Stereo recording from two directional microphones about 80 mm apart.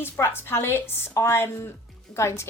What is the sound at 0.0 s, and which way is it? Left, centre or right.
A woman's voice, left.